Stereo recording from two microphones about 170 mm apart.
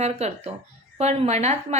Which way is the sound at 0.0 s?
40° right (ahead or behind).